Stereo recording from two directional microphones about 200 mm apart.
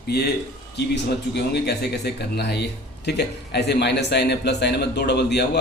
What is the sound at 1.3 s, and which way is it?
A man's voice, 55° left (ahead or behind).